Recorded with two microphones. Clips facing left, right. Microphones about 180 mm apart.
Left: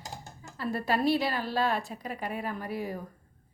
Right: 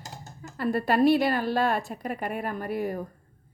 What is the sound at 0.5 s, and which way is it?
A woman's voice, 55° right (ahead or behind).